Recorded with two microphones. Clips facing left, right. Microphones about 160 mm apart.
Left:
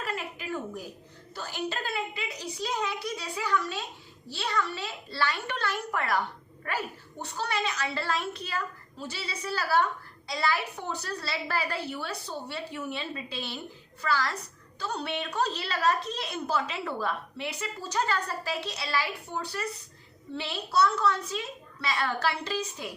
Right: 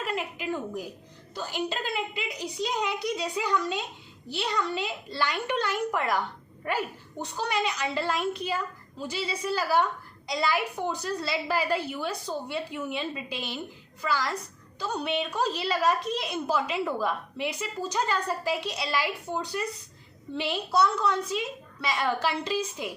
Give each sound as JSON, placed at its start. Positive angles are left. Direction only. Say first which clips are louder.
{"t": 0.0, "sound": "a sound", "louder": "right 4 dB", "side_deg": -15}
{"t": 1.4, "sound": "a woman's voice", "louder": "right 2 dB", "side_deg": -15}
{"t": 7.3, "sound": "a woman's voice", "louder": "right 2 dB", "side_deg": -15}